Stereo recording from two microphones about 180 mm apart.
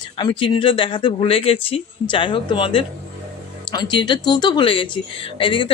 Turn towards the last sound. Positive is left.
turn(degrees=30)  # may be behind; listen again after turning